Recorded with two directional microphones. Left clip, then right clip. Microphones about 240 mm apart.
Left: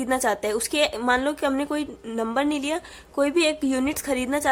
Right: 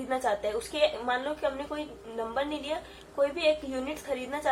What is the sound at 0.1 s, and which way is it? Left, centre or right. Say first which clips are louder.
A woman's voice: left 5 dB; left.